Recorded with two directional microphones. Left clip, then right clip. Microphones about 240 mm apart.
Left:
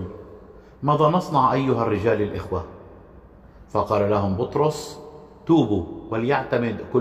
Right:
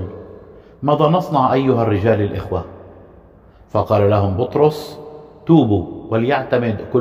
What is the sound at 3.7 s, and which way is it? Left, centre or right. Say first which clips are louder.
A man's voice: right 6 dB; right.